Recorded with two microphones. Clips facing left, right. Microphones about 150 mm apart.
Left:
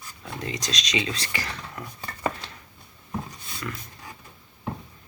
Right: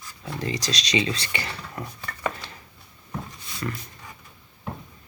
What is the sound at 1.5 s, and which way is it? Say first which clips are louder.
Speech: right 1 dB; 35° right (ahead or behind).